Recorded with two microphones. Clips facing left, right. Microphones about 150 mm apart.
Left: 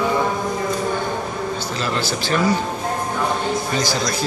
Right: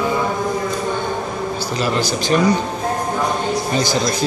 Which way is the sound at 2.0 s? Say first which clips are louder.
Right 3 dB; 15° right (ahead or behind).